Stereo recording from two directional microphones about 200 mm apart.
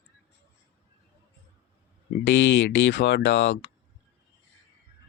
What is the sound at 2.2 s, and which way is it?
Speech, 70° left (ahead or behind).